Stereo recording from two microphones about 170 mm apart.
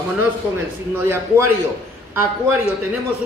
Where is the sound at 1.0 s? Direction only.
15° right (ahead or behind).